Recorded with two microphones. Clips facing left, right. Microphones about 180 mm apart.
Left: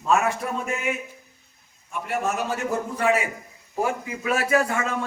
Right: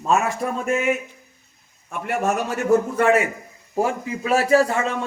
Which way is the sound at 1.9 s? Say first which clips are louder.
Right 4 dB; 70° right (ahead or behind).